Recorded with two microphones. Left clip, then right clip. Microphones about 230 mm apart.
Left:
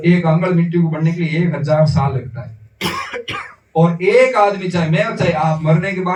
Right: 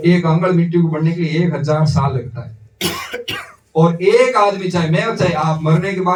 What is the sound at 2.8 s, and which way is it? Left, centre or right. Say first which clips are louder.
Cough: even; centre.